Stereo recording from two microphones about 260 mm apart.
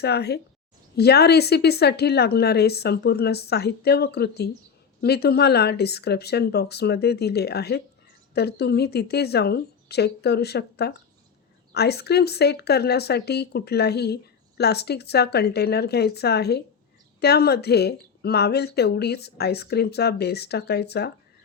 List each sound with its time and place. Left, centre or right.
0.0 s speech: left